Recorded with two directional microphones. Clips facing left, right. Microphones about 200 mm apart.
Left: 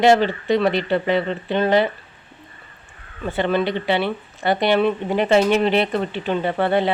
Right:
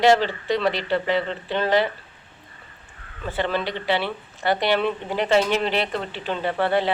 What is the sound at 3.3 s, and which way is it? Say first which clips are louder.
Speech: left 5 dB; 20° left (ahead or behind).